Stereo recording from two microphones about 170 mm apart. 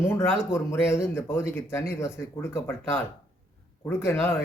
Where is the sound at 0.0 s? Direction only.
15° left (ahead or behind).